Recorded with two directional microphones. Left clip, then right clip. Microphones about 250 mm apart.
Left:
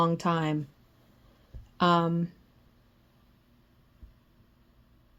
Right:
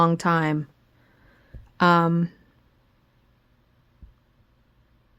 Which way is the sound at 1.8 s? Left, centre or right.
Right.